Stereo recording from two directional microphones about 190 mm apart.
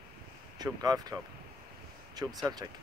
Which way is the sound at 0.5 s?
20° right (ahead or behind).